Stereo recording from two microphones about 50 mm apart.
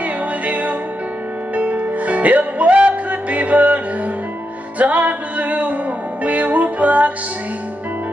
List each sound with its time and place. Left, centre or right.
0.5 s music: right